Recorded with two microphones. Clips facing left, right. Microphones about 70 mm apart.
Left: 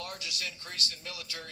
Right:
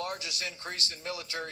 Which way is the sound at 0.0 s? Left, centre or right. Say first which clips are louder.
Right 4 dB; right.